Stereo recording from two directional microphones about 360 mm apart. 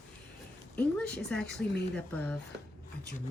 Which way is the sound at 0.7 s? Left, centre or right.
Centre.